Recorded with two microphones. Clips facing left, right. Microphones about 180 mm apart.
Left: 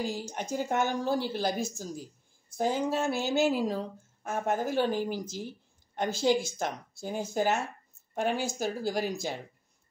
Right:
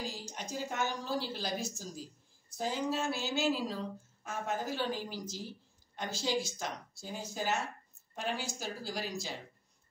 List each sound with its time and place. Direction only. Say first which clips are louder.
0.0 s speech: left 8 dB; 55° left (ahead or behind)